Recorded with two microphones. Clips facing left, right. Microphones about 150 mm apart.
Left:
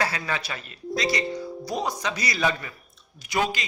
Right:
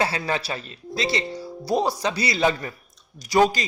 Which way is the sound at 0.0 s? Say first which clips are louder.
Right 3 dB; 30° right (ahead or behind).